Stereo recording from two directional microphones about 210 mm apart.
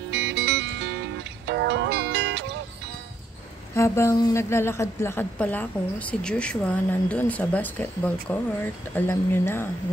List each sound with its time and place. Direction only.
0.1 s music: 55° right (ahead or behind)
3.7 s a woman's voice: 15° left (ahead or behind)